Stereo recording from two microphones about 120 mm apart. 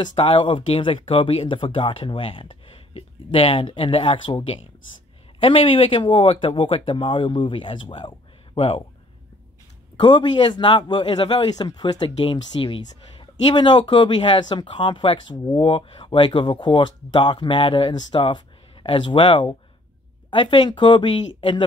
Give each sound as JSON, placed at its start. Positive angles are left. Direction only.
{"t": 0.2, "sound": "speech", "side_deg": 45}
{"t": 9.9, "sound": "a man's voice", "side_deg": 40}